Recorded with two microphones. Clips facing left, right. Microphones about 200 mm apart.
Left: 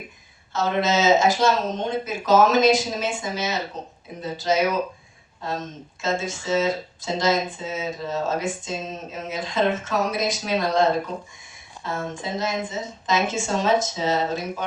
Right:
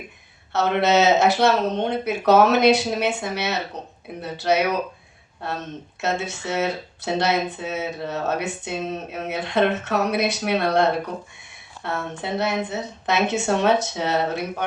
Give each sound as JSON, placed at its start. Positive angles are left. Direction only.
{"t": 0.5, "sound": "speech", "side_deg": -65}